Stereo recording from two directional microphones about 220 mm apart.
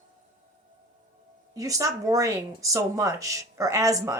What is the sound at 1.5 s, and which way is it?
A woman's voice, 15° right (ahead or behind).